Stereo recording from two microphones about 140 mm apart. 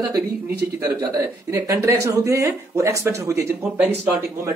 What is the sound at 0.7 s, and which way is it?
Speech, 25° right (ahead or behind).